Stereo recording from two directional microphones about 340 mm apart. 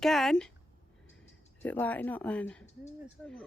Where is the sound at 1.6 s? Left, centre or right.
Centre.